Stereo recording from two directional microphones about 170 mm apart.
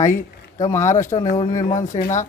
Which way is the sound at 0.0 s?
20° left (ahead or behind).